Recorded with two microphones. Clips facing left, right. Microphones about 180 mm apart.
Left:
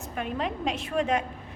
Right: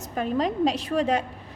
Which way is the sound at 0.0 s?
35° right (ahead or behind).